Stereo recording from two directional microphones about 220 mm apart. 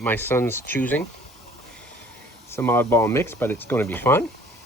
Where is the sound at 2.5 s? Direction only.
10° left (ahead or behind).